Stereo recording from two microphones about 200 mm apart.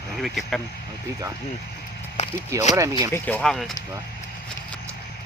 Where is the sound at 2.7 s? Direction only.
15° right (ahead or behind).